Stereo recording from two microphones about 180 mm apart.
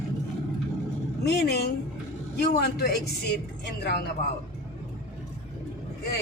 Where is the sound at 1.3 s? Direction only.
65° left (ahead or behind).